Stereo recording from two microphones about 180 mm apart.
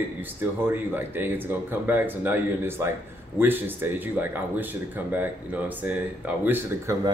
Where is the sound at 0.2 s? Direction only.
10° right (ahead or behind).